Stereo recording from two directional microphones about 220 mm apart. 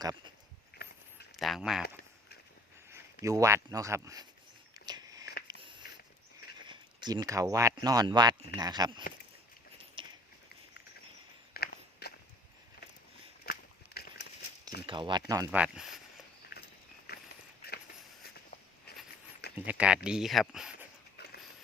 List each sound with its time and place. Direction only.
0.8 s a sound: 45° left (ahead or behind)
1.4 s speech: centre (ahead or behind)
2.9 s speech: 15° right (ahead or behind)
4.9 s biting: 15° right (ahead or behind)
5.5 s a sound: 20° right (ahead or behind)
6.7 s speech: 20° right (ahead or behind)
10.0 s a sound: 25° right (ahead or behind)
11.5 s biting: 45° left (ahead or behind)
13.4 s a sound: 45° left (ahead or behind)
14.8 s speech: 20° right (ahead or behind)
15.6 s speech: 5° right (ahead or behind)
17.1 s walk: 45° left (ahead or behind)
18.9 s walk: 45° left (ahead or behind)
19.5 s speech: 5° right (ahead or behind)